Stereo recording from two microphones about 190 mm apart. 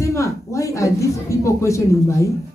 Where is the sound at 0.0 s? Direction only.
15° left (ahead or behind).